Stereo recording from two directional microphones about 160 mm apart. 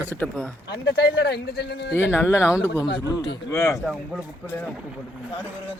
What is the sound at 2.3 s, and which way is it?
Speech, 5° right (ahead or behind).